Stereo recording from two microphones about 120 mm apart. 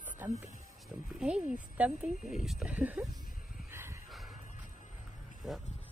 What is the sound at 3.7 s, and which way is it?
Dog, 20° right (ahead or behind).